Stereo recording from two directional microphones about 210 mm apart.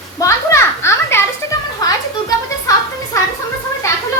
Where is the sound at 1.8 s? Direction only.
15° left (ahead or behind).